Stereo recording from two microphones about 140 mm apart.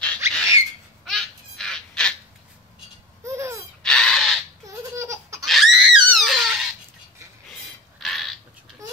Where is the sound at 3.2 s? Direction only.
20° right (ahead or behind).